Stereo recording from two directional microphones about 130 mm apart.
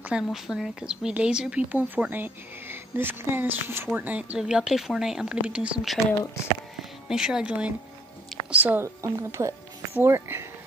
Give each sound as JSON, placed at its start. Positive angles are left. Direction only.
{"t": 0.0, "sound": "a woman's voice", "side_deg": -5}